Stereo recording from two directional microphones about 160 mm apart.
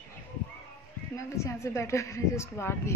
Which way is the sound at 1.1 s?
20° left (ahead or behind).